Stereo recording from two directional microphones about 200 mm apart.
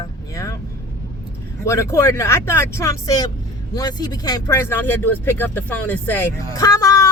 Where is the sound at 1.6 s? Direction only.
15° left (ahead or behind).